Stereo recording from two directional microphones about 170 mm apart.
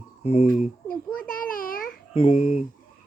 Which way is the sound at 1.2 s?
55° left (ahead or behind).